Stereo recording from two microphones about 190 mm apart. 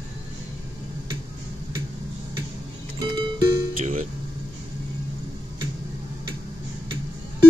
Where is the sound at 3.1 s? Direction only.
20° right (ahead or behind).